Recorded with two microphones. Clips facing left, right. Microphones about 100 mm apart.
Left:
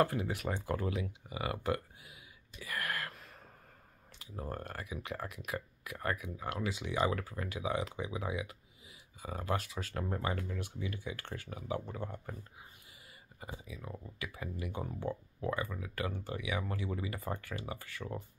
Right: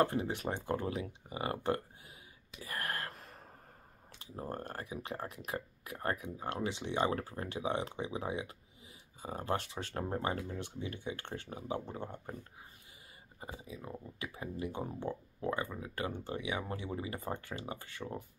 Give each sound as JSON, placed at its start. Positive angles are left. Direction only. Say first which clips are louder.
{"t": 0.0, "sound": "speech", "louder": "even", "side_deg": -30}
{"t": 2.6, "sound": "a sound", "louder": "left 1 dB", "side_deg": -30}
{"t": 4.2, "sound": "speech", "louder": "right 1 dB", "side_deg": -30}
{"t": 13.4, "sound": "speech", "louder": "right 1 dB", "side_deg": -30}